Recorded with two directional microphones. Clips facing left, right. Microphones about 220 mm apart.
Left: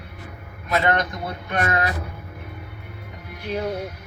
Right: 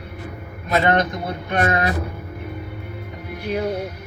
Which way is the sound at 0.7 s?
20° right (ahead or behind).